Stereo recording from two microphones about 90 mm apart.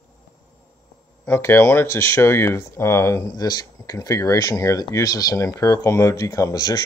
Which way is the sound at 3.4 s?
45° left (ahead or behind).